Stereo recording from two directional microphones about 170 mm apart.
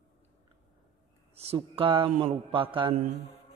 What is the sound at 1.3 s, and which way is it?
Speech, 35° right (ahead or behind).